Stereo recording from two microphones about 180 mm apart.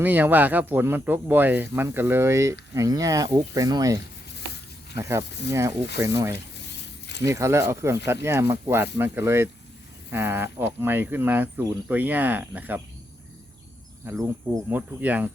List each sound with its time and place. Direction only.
0.0 s speech: 10° right (ahead or behind)
14.0 s speech: 15° right (ahead or behind)